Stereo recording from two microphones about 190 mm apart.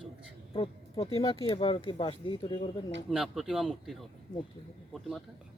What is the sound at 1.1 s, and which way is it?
Speech, 20° left (ahead or behind).